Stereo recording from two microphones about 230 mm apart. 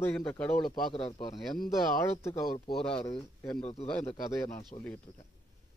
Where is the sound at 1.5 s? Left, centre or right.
Left.